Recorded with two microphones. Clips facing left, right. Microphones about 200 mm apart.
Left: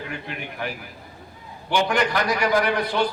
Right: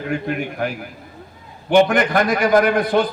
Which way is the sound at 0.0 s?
50° right (ahead or behind).